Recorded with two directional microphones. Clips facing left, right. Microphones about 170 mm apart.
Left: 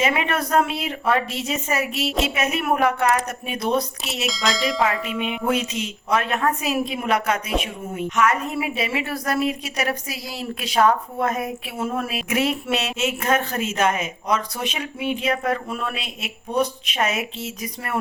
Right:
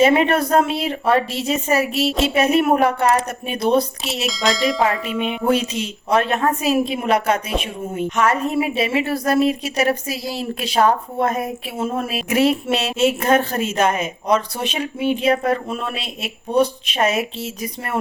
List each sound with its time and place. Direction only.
0.0 s a woman's voice: 35° right (ahead or behind)
4.3 s speech: centre (ahead or behind)
5.5 s a woman's voice: 30° right (ahead or behind)